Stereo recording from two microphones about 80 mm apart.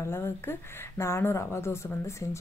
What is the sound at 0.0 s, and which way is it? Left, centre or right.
A woman's voice, left.